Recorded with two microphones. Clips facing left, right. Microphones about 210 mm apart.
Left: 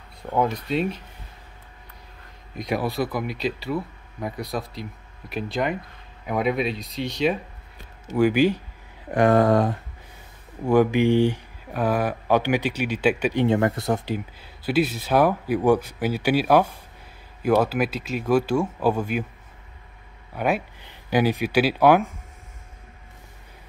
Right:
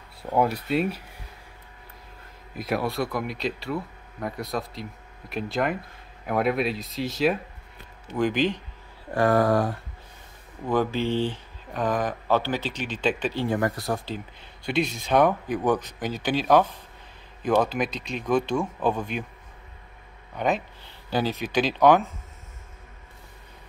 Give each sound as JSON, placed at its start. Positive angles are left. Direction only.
{"t": 0.2, "sound": "speech", "side_deg": -10}
{"t": 2.5, "sound": "speech", "side_deg": 0}
{"t": 8.2, "sound": "speech", "side_deg": 10}
{"t": 9.1, "sound": "a sound", "side_deg": 20}
{"t": 10.7, "sound": "speech", "side_deg": 15}
{"t": 14.1, "sound": "speech", "side_deg": 5}
{"t": 20.3, "sound": "speech", "side_deg": 10}